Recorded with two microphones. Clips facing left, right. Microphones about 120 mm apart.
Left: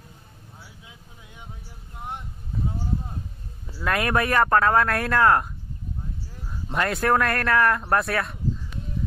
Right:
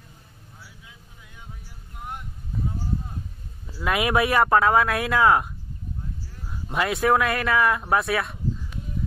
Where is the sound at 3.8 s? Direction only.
10° right (ahead or behind).